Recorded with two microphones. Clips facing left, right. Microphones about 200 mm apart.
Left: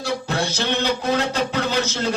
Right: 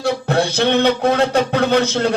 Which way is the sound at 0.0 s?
60° right (ahead or behind).